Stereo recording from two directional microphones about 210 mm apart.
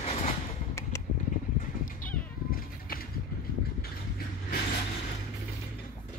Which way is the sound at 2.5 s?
45° left (ahead or behind).